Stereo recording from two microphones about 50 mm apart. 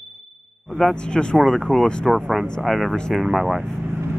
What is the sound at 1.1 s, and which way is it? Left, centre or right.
Speech, centre.